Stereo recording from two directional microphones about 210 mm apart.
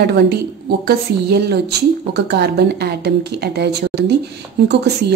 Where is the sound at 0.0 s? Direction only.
50° right (ahead or behind).